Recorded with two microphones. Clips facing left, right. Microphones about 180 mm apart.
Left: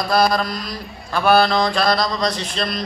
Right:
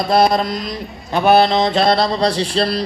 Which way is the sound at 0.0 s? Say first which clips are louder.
Right 3 dB; 25° right (ahead or behind).